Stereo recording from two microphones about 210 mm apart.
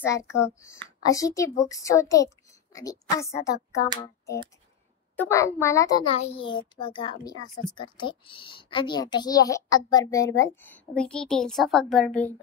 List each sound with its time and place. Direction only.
0.0 s a woman's voice: 15° left (ahead or behind)
5.1 s a woman's voice: 10° left (ahead or behind)
6.1 s a child's voice: 30° left (ahead or behind); by 12.4 s 5° left (ahead or behind)